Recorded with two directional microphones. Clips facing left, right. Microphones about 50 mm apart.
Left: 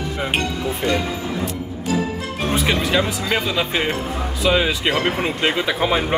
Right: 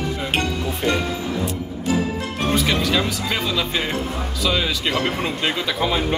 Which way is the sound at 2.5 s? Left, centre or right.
Left.